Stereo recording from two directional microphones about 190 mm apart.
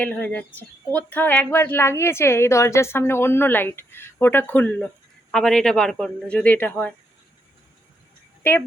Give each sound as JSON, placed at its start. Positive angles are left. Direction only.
{"t": 0.0, "sound": "speech", "side_deg": 5}
{"t": 8.4, "sound": "speech", "side_deg": 10}